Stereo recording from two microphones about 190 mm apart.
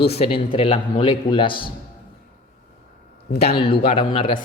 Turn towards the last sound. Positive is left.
turn(degrees=25)  # may be behind; listen again after turning